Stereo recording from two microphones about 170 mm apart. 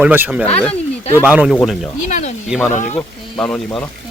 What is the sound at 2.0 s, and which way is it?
Speech, 45° left (ahead or behind).